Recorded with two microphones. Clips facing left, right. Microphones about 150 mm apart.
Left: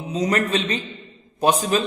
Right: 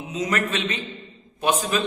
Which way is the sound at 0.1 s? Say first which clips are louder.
Left 4 dB; 35° left (ahead or behind).